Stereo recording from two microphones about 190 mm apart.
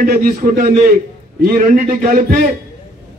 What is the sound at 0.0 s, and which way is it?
A man's voice, 50° right (ahead or behind).